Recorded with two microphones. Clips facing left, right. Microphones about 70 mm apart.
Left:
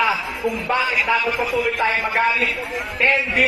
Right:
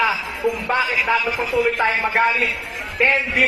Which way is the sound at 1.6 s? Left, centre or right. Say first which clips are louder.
Right 4 dB; right.